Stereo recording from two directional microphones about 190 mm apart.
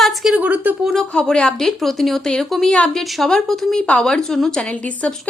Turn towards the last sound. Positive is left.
turn(degrees=5)  # may be behind; listen again after turning